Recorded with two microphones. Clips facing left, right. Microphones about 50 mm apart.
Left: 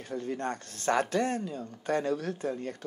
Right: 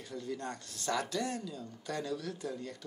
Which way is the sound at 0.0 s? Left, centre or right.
Left.